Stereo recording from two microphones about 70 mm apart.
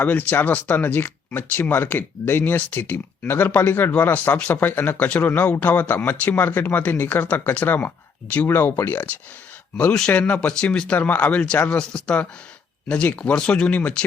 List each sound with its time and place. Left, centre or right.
0.0 s speech: left
8.4 s speech: left
10.1 s speech: left
10.9 s speech: left